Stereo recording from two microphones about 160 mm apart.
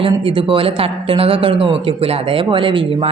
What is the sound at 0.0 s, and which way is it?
Speech, 35° right (ahead or behind).